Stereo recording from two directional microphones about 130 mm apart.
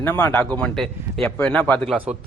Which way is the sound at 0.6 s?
Centre (ahead or behind).